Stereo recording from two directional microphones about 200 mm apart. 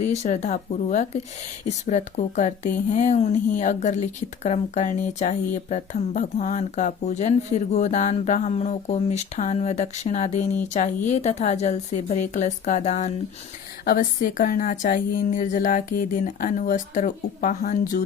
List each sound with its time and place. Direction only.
0.0 s speech: 35° left (ahead or behind)